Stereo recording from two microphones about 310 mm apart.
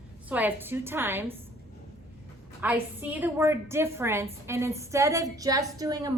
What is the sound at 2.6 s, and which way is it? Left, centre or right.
A woman's voice, centre.